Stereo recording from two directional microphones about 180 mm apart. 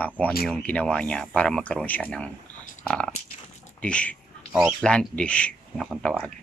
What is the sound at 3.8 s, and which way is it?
Speech, 5° left (ahead or behind).